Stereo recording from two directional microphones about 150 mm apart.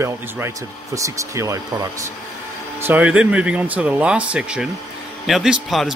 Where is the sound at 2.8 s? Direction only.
10° right (ahead or behind).